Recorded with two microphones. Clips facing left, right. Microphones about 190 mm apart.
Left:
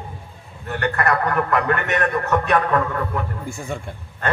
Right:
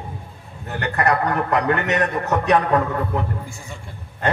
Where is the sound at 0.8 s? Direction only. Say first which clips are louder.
Right 1 dB; 20° right (ahead or behind).